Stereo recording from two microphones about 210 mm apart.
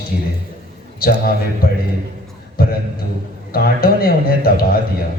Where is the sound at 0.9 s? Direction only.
45° left (ahead or behind).